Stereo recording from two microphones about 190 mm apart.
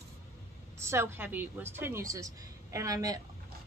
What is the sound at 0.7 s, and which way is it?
A woman's voice, 15° right (ahead or behind).